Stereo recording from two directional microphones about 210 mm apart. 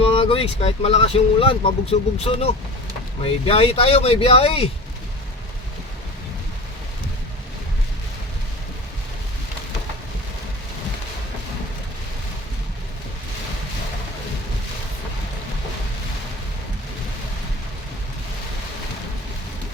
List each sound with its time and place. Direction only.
0.0 s speech: 25° left (ahead or behind)